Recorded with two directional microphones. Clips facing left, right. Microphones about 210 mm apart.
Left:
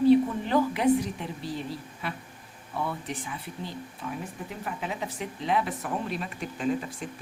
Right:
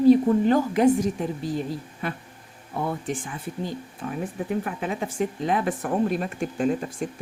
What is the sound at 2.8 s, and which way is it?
A woman's voice, 45° right (ahead or behind).